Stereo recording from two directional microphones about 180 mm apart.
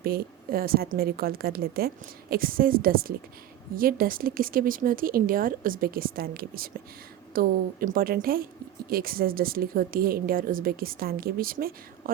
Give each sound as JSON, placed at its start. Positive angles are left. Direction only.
{"t": 0.0, "sound": "a woman's voice", "side_deg": -60}